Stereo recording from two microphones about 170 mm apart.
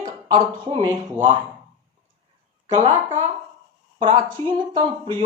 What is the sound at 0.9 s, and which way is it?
Speech, 45° right (ahead or behind).